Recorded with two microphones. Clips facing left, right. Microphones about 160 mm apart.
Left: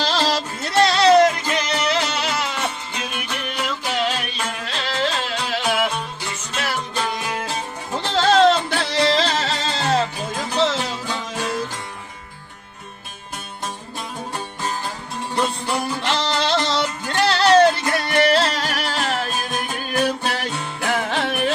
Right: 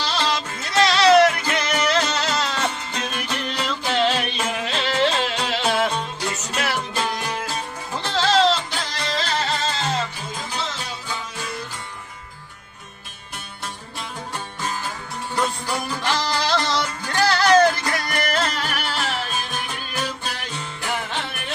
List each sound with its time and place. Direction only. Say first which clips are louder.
0.0 s music: left 3 dB; 40° left (ahead or behind); by 5.9 s 10° left (ahead or behind)
6.5 s music: left 2 dB; 5° right (ahead or behind)
8.1 s music: left 4 dB; 50° left (ahead or behind); by 9.3 s 85° left
9.9 s music: left 6 dB; 65° left (ahead or behind)
15.4 s music: left 2 dB; 25° left (ahead or behind); by 21.5 s 85° left